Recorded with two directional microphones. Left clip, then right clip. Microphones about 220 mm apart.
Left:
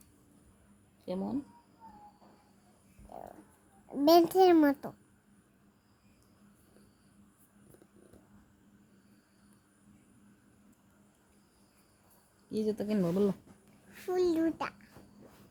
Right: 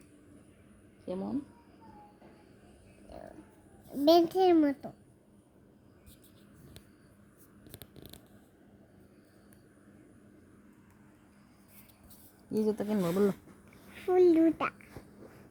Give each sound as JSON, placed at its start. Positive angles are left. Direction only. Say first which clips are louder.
{"t": 1.0, "sound": "speech", "louder": "even", "side_deg": 15}
{"t": 4.0, "sound": "a child's voice", "louder": "left 1 dB", "side_deg": 20}
{"t": 12.5, "sound": "speech", "louder": "right 2 dB", "side_deg": 0}
{"t": 13.9, "sound": "a child's voice", "louder": "right 6 dB", "side_deg": 0}